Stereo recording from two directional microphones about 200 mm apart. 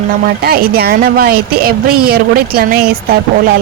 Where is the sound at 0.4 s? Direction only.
50° right (ahead or behind).